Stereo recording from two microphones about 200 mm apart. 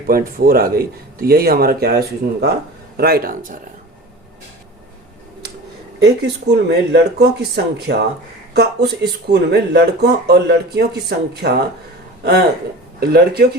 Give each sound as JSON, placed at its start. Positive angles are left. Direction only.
{"t": 0.1, "sound": "speech", "side_deg": -45}
{"t": 6.0, "sound": "speech", "side_deg": -55}
{"t": 13.0, "sound": "speech", "side_deg": -50}